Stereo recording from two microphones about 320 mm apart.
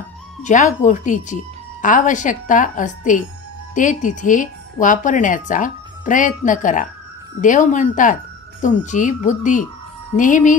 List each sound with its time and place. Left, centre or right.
0.4 s speech: left